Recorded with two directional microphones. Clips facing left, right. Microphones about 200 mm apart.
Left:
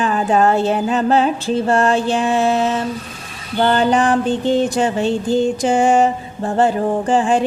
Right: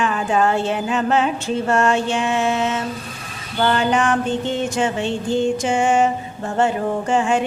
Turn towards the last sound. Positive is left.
turn(degrees=35)  # may be behind; listen again after turning